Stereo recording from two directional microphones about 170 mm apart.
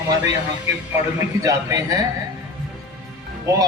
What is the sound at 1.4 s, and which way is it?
Speech, 20° right (ahead or behind).